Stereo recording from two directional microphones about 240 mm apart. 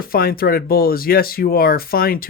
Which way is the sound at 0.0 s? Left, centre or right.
Left.